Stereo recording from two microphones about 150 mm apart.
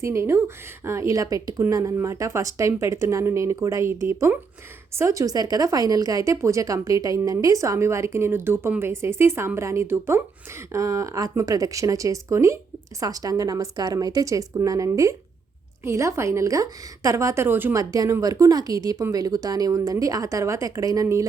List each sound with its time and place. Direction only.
0.0 s a woman's voice: 20° right (ahead or behind)